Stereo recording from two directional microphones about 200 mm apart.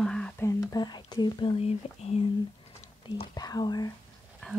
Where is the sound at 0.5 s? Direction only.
15° left (ahead or behind); by 2.2 s 30° left (ahead or behind).